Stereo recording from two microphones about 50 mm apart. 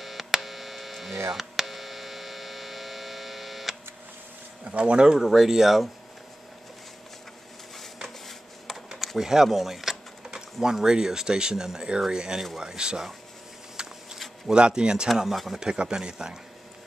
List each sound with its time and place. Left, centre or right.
0.0 s hum: centre
4.6 s speech: right
5.2 s speech: centre
8.3 s a sound: centre
9.2 s speech: centre
13.8 s a sound: centre
14.5 s speech: centre
15.0 s speech: centre
15.6 s speech: centre